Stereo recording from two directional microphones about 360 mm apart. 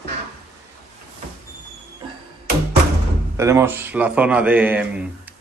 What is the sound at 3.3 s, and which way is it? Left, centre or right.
A man's voice, centre.